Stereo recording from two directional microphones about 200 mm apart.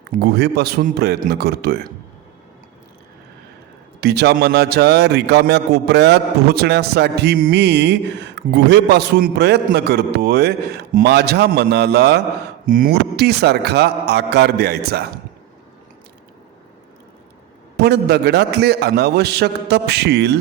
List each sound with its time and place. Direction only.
0.1 s a man's voice: 55° right (ahead or behind)
4.0 s a man's voice: 55° right (ahead or behind)
12.6 s a man's voice: 45° right (ahead or behind)
17.7 s a man's voice: 55° right (ahead or behind)